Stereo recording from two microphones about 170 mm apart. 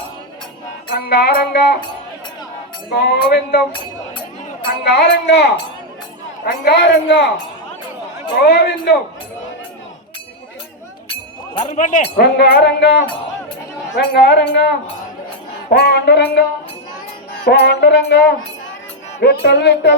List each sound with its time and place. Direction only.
0.9 s music: 60° left (ahead or behind)
2.9 s music: 70° left (ahead or behind)
4.9 s music: 80° left
6.4 s a woman's voice: 85° left
8.4 s music: 70° left (ahead or behind)
11.1 s music: 35° left (ahead or behind)
11.8 s speech: 50° left (ahead or behind)
12.1 s music: 65° left (ahead or behind); by 14.8 s 85° left
15.7 s music: 70° left (ahead or behind)
17.4 s music: 80° left